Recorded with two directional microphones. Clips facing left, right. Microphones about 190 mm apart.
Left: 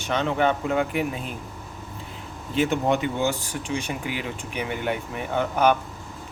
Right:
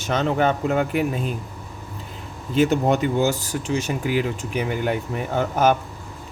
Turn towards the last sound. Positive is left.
turn(degrees=-40)  # may be behind; listen again after turning